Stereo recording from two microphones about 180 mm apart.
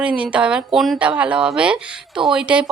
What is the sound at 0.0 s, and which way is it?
A woman's voice, 5° right (ahead or behind).